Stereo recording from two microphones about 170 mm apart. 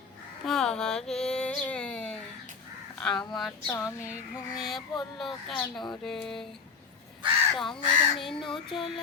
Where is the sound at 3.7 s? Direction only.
15° left (ahead or behind).